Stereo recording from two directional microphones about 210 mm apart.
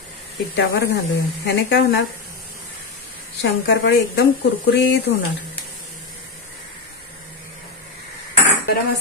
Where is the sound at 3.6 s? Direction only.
50° left (ahead or behind).